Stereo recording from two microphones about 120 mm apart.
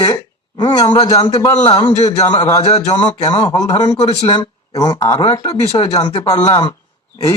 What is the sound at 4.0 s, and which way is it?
Speech, 55° left (ahead or behind).